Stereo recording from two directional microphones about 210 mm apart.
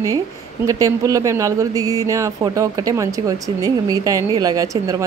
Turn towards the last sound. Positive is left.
turn(degrees=-15)  # may be behind; listen again after turning